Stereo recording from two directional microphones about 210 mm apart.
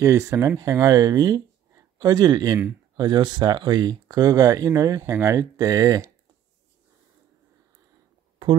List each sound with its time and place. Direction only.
0.0 s speech: 15° right (ahead or behind)